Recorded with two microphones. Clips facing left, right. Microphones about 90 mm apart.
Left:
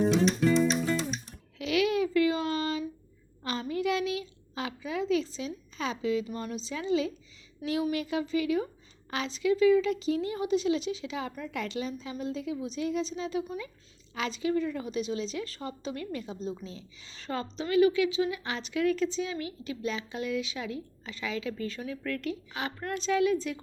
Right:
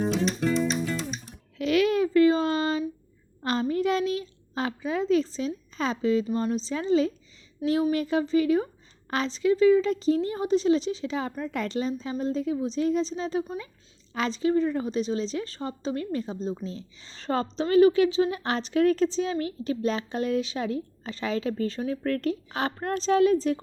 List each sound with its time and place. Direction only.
0.3 s music: centre (ahead or behind)
1.5 s a sound: 40° right (ahead or behind)
3.4 s a woman's voice: 40° right (ahead or behind)